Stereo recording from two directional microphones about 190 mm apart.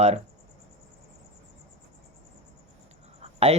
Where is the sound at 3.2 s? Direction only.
35° right (ahead or behind).